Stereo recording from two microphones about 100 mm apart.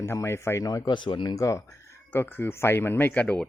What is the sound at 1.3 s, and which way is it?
Speech, 30° left (ahead or behind).